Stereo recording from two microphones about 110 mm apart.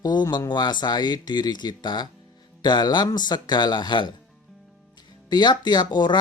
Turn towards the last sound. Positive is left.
turn(degrees=40)  # may be behind; listen again after turning